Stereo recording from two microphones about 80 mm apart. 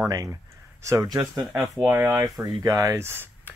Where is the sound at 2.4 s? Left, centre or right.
Right.